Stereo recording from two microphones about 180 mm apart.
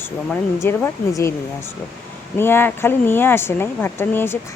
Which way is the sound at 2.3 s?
10° left (ahead or behind).